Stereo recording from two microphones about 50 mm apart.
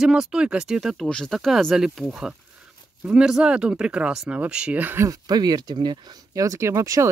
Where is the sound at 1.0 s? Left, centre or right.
Centre.